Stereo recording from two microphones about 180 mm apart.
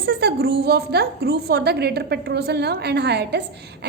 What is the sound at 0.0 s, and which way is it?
A woman's voice, 65° right (ahead or behind).